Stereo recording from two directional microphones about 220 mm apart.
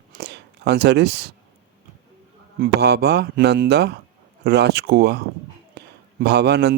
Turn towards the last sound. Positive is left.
turn(degrees=-50)  # may be behind; listen again after turning